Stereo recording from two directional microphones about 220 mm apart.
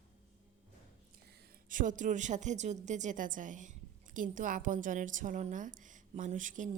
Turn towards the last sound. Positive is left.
turn(degrees=-35)  # may be behind; listen again after turning